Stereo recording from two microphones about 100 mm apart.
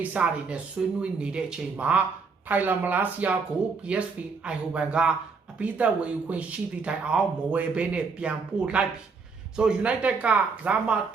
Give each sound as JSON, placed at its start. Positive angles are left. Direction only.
{"t": 0.0, "sound": "speech", "side_deg": -15}